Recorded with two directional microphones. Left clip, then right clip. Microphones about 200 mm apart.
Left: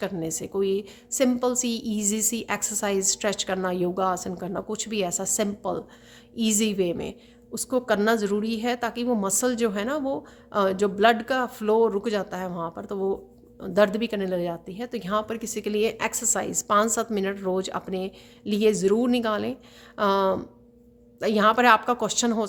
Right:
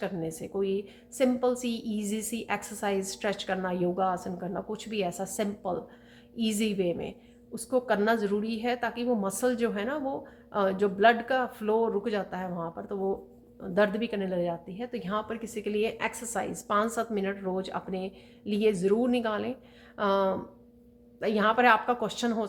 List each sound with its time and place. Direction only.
0.0 s a woman's voice: 45° left (ahead or behind)